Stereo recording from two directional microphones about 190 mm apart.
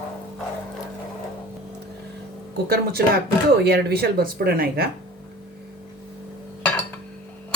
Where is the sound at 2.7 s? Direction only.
55° right (ahead or behind).